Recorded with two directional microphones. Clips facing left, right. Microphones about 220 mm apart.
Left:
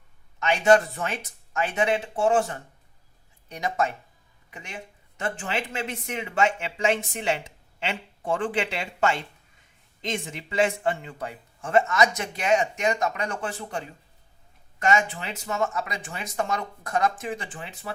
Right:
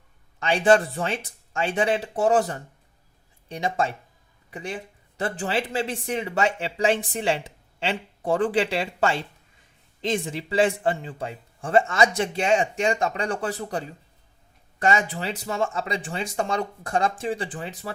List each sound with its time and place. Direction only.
0.3 s speech: 30° right (ahead or behind)